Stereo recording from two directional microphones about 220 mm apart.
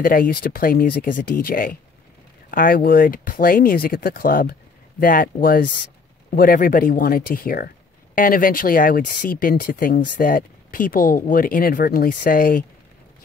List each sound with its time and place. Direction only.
0.0 s speech: 40° left (ahead or behind)